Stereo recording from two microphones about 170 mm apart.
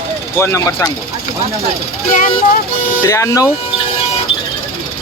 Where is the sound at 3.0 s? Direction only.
15° left (ahead or behind).